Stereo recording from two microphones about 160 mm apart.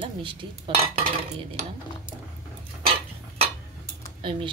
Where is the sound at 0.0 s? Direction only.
30° right (ahead or behind).